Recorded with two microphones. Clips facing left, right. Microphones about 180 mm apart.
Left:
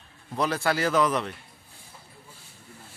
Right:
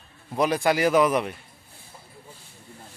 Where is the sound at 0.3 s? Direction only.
15° right (ahead or behind).